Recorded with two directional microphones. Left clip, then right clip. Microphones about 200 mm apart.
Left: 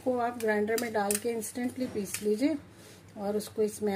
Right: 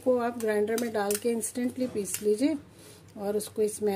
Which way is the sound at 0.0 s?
20° right (ahead or behind).